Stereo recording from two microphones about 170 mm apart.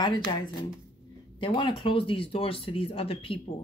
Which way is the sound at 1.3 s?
30° left (ahead or behind).